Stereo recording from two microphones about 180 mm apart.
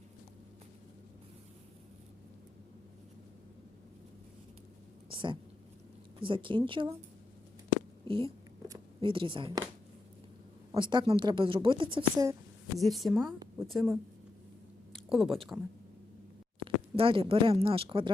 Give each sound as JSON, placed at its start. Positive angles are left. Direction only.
{"t": 5.0, "sound": "a sound", "side_deg": -30}
{"t": 6.1, "sound": "speech", "side_deg": -30}
{"t": 8.0, "sound": "speech", "side_deg": -30}
{"t": 10.7, "sound": "speech", "side_deg": -25}
{"t": 12.8, "sound": "a woman's voice", "side_deg": 0}
{"t": 14.9, "sound": "a sound", "side_deg": 0}
{"t": 16.6, "sound": "speech", "side_deg": -30}